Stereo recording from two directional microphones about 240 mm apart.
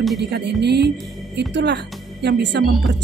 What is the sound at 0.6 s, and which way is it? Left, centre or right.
A woman's voice, right.